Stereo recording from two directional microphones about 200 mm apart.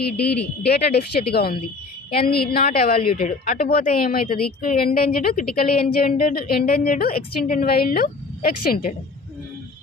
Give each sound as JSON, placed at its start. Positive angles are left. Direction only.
{"t": 0.6, "sound": "a woman's voice", "side_deg": 55}